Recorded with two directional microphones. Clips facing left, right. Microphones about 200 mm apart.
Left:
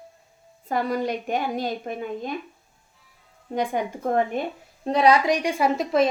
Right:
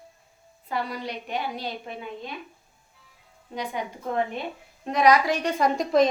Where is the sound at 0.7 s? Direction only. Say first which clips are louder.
Left 6 dB; 45° left (ahead or behind).